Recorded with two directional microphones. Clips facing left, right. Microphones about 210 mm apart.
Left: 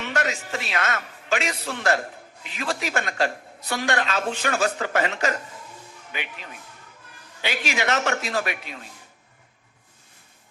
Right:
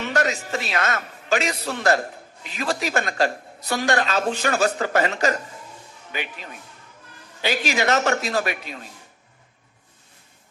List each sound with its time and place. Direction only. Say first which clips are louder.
0.0 s a man's voice: right 3 dB; 40° right (ahead or behind)
7.4 s a woman's voice: right 4 dB; 40° right (ahead or behind)